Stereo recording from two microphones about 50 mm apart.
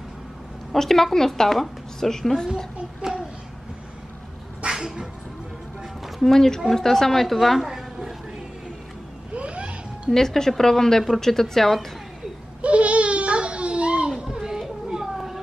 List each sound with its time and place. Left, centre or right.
0.7 s a woman's voice: centre
2.4 s a child's voice: centre
4.7 s cat: centre
6.0 s a woman's voice: centre
9.3 s a sound: right
10.1 s a woman's voice: centre
12.6 s baby cry: right
14.9 s a sound: centre